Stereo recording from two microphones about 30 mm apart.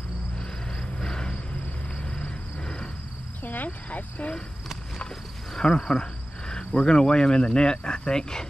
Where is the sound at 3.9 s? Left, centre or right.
Left.